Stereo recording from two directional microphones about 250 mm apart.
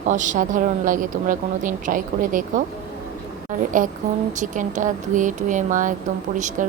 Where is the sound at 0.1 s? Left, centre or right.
Right.